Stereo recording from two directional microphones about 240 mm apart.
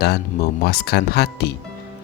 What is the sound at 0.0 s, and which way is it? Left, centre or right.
Speech, left.